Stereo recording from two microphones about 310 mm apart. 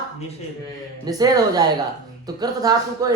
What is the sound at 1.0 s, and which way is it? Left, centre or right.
Speech, centre.